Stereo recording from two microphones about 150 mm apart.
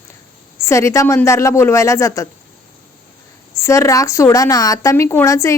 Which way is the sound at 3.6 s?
20° left (ahead or behind).